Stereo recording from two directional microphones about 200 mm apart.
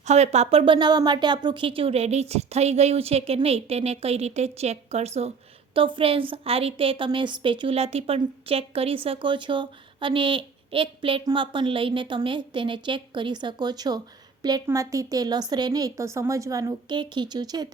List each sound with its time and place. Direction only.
0.0 s a woman's voice: 35° right (ahead or behind)